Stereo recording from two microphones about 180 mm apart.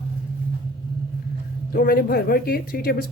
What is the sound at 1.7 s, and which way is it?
Speech, 55° left (ahead or behind).